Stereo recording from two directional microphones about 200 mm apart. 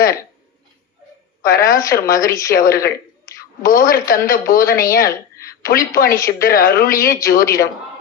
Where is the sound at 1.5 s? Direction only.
45° left (ahead or behind).